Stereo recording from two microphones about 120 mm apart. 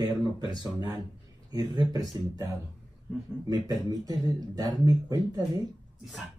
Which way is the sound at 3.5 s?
30° right (ahead or behind).